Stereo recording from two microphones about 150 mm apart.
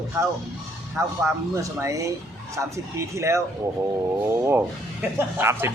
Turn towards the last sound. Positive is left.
turn(degrees=-15)  # may be behind; listen again after turning